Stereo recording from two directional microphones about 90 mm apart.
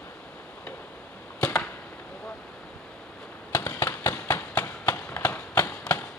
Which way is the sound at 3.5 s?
30° left (ahead or behind).